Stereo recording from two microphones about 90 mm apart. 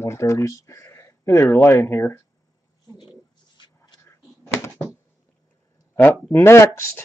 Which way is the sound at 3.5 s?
55° left (ahead or behind).